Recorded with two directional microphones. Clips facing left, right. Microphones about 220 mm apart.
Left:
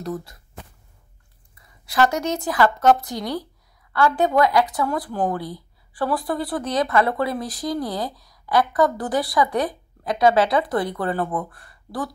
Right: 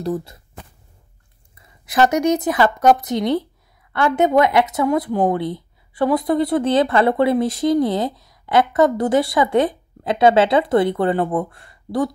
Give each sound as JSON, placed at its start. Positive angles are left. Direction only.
{"t": 0.0, "sound": "speech", "side_deg": -25}
{"t": 1.9, "sound": "speech", "side_deg": -20}